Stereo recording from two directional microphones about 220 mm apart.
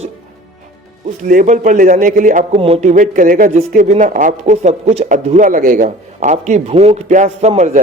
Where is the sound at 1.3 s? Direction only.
35° right (ahead or behind).